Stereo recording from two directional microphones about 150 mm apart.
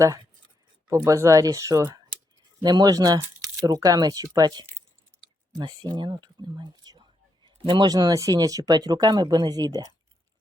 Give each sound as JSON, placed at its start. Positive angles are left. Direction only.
{"t": 0.9, "sound": "speech", "side_deg": -20}